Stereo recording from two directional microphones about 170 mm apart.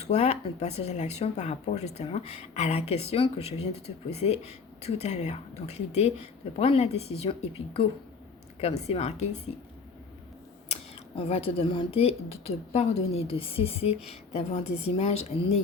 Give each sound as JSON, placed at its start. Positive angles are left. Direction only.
{"t": 0.0, "sound": "speech", "side_deg": 40}
{"t": 11.1, "sound": "speech", "side_deg": 35}